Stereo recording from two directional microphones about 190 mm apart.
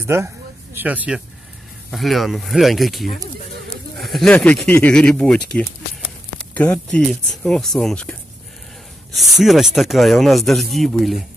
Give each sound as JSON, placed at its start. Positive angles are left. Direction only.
{"t": 0.0, "sound": "speech", "side_deg": -15}